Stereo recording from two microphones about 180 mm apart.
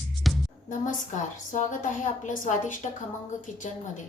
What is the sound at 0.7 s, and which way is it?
A woman's voice, 45° left (ahead or behind).